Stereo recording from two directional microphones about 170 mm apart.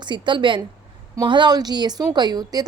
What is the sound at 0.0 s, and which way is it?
A woman's voice, 25° right (ahead or behind).